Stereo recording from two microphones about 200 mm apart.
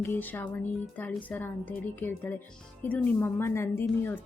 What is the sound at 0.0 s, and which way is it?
A woman's voice, 10° left (ahead or behind).